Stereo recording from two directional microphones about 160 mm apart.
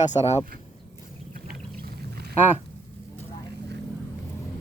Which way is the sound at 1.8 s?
80° right.